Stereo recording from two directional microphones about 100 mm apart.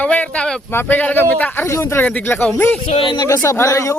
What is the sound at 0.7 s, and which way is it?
Speech, 20° left (ahead or behind).